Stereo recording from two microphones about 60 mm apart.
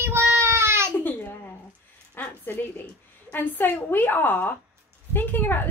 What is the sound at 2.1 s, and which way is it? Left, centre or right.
Zipper, left.